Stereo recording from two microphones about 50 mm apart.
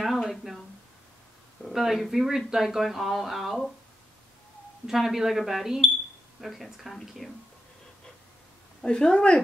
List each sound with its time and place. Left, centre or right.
0.0 s a sound: centre
1.7 s speech: centre
4.8 s speech: centre
8.8 s speech: centre